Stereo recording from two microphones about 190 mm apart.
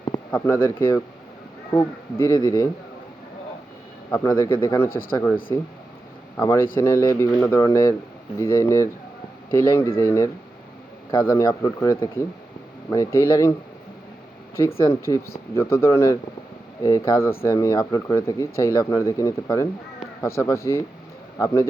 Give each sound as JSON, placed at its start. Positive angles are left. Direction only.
{"t": 0.3, "sound": "speech", "side_deg": 10}
{"t": 4.1, "sound": "speech", "side_deg": 15}
{"t": 4.9, "sound": "speech", "side_deg": 50}
{"t": 5.5, "sound": "speech", "side_deg": 15}
{"t": 14.8, "sound": "speech", "side_deg": 15}